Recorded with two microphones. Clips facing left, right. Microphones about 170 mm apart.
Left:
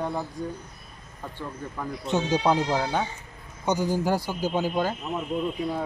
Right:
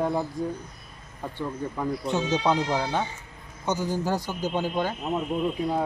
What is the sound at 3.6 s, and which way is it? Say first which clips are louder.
A man's voice: left 2 dB; 15° left (ahead or behind).